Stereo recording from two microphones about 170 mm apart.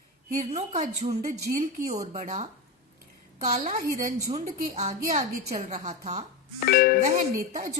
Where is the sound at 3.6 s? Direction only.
55° right (ahead or behind).